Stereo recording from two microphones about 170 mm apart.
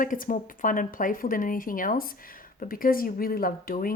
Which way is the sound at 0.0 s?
55° left (ahead or behind).